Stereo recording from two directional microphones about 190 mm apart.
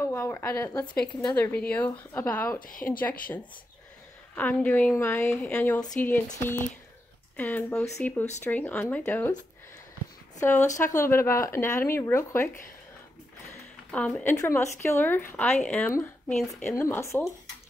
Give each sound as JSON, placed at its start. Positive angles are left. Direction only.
{"t": 0.0, "sound": "a woman's voice", "side_deg": 15}
{"t": 2.6, "sound": "speech", "side_deg": 45}
{"t": 3.0, "sound": "a woman's voice", "side_deg": 10}
{"t": 4.4, "sound": "a woman's voice", "side_deg": 10}
{"t": 10.4, "sound": "a woman's voice", "side_deg": 15}
{"t": 13.9, "sound": "a woman's voice", "side_deg": 5}